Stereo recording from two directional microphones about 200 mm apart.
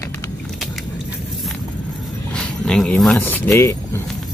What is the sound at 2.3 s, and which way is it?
Speech, 5° left (ahead or behind).